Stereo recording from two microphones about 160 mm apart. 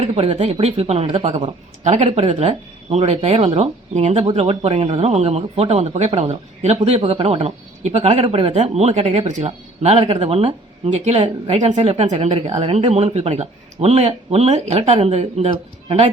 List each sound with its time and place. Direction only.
0.0 s speech: 40° right (ahead or behind)